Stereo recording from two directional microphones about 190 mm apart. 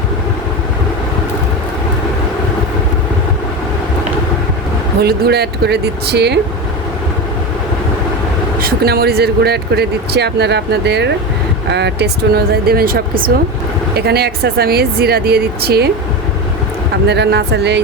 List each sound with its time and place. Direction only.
4.9 s speech: 55° right (ahead or behind)
8.6 s speech: 55° right (ahead or behind)
17.1 s speech: 60° right (ahead or behind)